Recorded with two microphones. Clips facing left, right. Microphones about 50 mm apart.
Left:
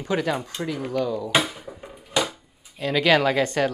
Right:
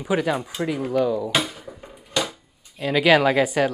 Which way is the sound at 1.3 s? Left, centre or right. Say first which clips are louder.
Left 1 dB; centre.